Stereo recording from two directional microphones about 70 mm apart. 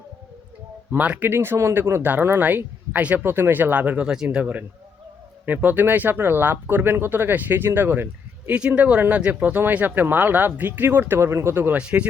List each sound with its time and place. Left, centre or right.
0.9 s speech: right
11.8 s speech: centre